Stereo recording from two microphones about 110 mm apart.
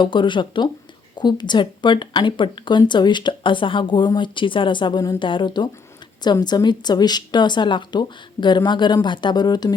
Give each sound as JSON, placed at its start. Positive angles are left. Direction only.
{"t": 0.0, "sound": "speech", "side_deg": 45}